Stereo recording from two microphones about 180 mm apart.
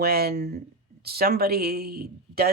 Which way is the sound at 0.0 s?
60° right (ahead or behind).